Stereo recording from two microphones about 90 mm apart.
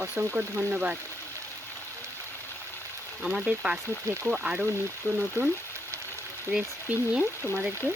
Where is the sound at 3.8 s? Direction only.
30° right (ahead or behind).